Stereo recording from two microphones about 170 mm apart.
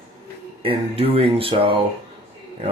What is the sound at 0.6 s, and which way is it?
Speech, 35° right (ahead or behind).